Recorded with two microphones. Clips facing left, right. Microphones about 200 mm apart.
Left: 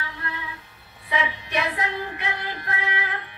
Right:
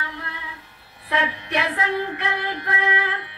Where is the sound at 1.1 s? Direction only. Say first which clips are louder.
Right 2 dB; 60° right (ahead or behind).